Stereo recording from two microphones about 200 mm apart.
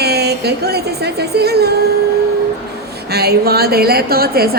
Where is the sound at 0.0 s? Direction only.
55° right (ahead or behind).